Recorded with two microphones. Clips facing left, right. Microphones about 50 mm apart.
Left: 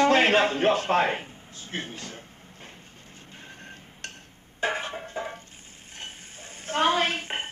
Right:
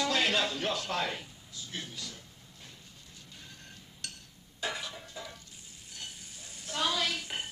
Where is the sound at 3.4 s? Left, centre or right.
Left.